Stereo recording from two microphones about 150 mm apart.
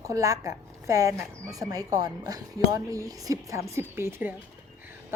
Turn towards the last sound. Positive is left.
turn(degrees=-15)  # may be behind; listen again after turning